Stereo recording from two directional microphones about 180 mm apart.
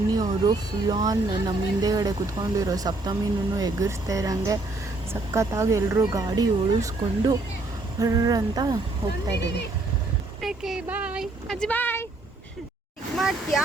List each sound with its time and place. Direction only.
0.1 s speech: 25° right (ahead or behind)
10.4 s speech: centre (ahead or behind)
13.1 s speech: centre (ahead or behind)